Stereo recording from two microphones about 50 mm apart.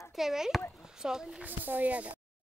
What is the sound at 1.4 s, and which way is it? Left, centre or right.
Speech, right.